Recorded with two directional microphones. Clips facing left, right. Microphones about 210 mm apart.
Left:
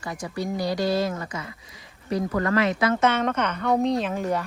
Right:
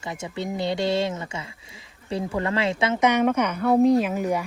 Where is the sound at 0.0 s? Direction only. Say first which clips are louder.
Left 1 dB; 25° right (ahead or behind).